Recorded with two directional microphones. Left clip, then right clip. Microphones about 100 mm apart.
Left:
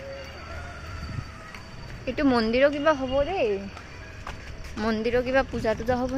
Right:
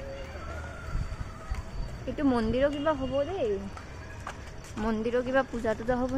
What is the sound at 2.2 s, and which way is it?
Speech, 20° left (ahead or behind).